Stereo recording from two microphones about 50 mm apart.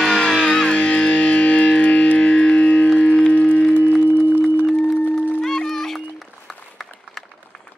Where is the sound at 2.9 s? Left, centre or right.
Left.